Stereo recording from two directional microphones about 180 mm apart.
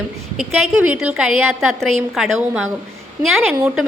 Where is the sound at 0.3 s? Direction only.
5° right (ahead or behind).